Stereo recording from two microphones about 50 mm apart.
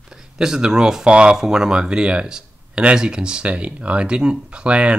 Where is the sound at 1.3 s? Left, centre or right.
Centre.